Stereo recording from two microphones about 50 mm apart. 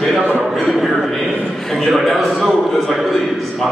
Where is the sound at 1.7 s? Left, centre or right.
Centre.